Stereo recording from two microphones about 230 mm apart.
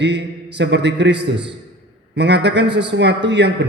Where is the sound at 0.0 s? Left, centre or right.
Right.